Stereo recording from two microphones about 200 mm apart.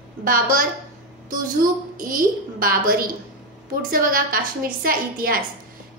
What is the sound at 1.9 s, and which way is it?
A woman's voice, 45° right (ahead or behind).